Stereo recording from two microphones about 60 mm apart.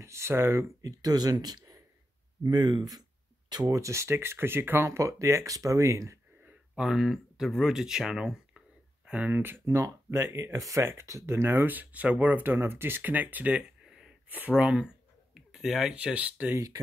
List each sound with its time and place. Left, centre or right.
0.0 s speech: right
3.6 s speech: right
6.8 s speech: centre
9.3 s speech: right
9.8 s speech: right
13.8 s a sound: centre
14.5 s speech: centre
15.3 s a sound: centre
15.9 s speech: centre
16.5 s speech: right